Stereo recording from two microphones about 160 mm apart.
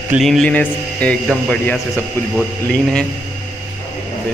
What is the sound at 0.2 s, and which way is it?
Mantra, 5° left (ahead or behind).